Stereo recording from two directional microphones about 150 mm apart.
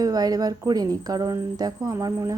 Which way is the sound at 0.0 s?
25° right (ahead or behind).